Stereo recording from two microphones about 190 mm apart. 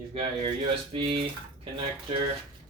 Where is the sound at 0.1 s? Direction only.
30° right (ahead or behind).